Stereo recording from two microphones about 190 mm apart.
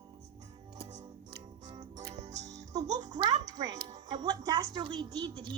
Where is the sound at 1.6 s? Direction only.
20° right (ahead or behind).